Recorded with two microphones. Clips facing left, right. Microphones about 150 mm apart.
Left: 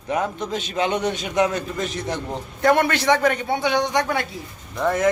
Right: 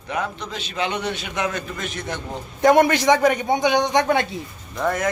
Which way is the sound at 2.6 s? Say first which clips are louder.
Right 3 dB; 15° right (ahead or behind).